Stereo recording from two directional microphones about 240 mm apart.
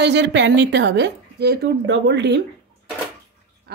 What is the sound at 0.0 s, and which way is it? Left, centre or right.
A woman's voice, right.